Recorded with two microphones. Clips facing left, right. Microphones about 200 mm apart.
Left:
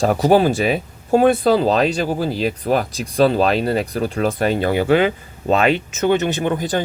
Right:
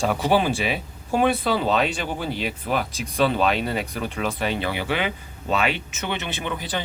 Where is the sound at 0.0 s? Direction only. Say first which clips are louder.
Left 7 dB; 40° left (ahead or behind).